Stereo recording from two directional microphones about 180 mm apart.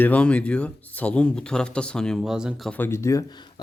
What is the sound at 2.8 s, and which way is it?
Speech, 15° left (ahead or behind).